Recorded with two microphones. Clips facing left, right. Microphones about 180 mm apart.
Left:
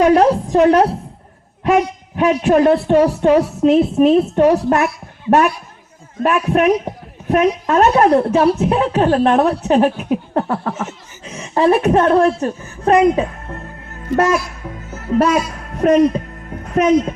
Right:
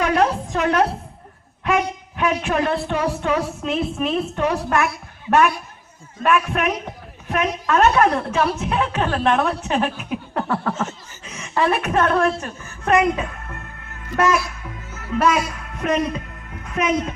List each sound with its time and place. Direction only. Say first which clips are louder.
0.0 s a man's voice: left 7 dB; 35° left (ahead or behind)
6.2 s a man's voice: left 6 dB; 35° left (ahead or behind)
10.5 s a woman's voice: left 2 dB; 20° left (ahead or behind)
11.3 s a woman's voice: left 7 dB; 30° left (ahead or behind)